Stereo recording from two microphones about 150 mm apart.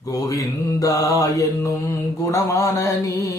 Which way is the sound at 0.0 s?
25° left (ahead or behind).